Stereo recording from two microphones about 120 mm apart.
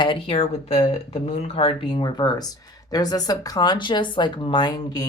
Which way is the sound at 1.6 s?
45° left (ahead or behind).